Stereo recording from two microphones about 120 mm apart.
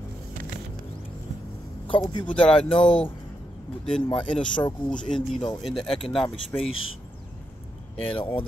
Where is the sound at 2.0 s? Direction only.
35° left (ahead or behind).